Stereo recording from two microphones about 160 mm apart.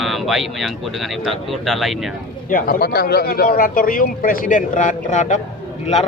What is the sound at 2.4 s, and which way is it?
Speech, 65° left (ahead or behind).